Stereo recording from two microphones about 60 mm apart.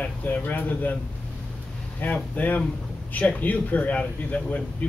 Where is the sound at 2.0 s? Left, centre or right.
Left.